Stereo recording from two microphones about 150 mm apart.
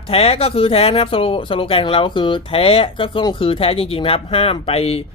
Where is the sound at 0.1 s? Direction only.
40° left (ahead or behind).